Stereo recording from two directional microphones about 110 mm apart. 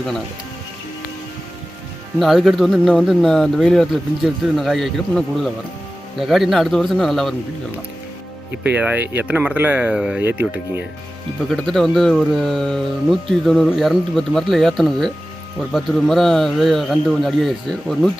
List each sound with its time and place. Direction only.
2.1 s speech: centre (ahead or behind)
8.6 s speech: 15° right (ahead or behind)
10.2 s speech: 20° right (ahead or behind)
11.4 s speech: centre (ahead or behind)